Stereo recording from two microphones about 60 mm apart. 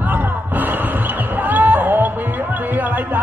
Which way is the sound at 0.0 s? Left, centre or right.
Right.